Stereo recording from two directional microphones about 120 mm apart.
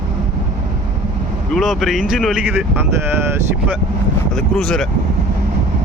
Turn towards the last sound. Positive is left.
turn(degrees=5)  # may be behind; listen again after turning